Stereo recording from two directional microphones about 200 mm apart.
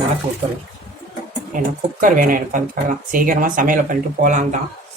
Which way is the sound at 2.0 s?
40° right (ahead or behind).